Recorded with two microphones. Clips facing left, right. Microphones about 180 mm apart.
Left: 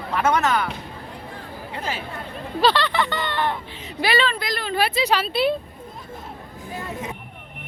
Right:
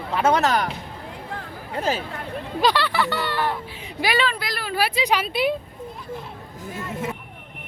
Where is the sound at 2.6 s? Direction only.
10° right (ahead or behind).